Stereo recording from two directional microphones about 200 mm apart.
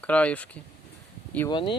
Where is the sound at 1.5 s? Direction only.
25° left (ahead or behind).